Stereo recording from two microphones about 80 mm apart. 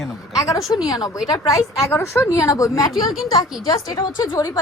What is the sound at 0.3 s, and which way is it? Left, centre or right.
A woman's voice, left.